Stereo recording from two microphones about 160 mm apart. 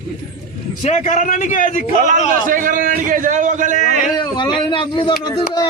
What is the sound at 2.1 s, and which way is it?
A man's voice, 55° right (ahead or behind).